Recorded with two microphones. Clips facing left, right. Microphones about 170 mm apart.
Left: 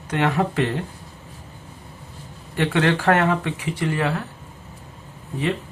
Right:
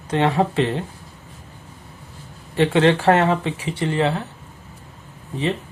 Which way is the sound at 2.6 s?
30° right (ahead or behind).